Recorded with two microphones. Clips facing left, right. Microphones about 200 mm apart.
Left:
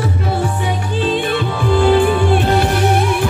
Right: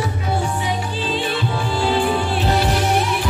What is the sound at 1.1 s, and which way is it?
Music, 55° left (ahead or behind).